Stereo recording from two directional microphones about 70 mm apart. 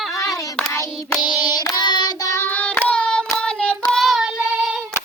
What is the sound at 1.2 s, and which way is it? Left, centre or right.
Child singing, left.